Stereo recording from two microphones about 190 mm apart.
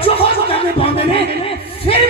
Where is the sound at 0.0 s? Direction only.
30° left (ahead or behind).